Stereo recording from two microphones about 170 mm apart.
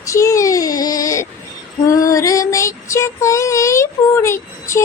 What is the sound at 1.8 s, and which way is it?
Female singing, 20° left (ahead or behind).